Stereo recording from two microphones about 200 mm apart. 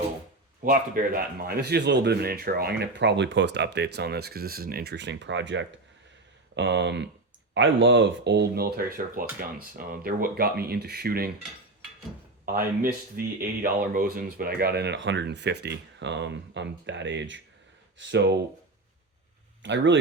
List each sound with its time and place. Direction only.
0.6 s speech: 45° right (ahead or behind)
12.5 s speech: 45° right (ahead or behind); by 18.3 s 65° right (ahead or behind)
19.6 s speech: 65° right (ahead or behind)